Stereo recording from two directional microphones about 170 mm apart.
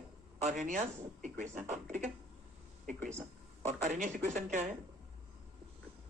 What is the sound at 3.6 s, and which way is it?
Speech, 45° right (ahead or behind).